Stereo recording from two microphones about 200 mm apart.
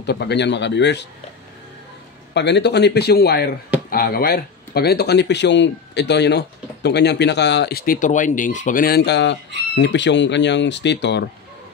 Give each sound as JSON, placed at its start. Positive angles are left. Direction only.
{"t": 0.0, "sound": "speech", "side_deg": 55}
{"t": 2.3, "sound": "speech", "side_deg": 60}